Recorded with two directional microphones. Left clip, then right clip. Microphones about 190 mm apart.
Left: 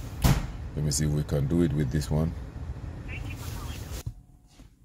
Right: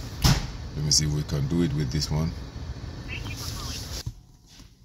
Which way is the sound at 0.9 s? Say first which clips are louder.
Right 6 dB; 40° left (ahead or behind).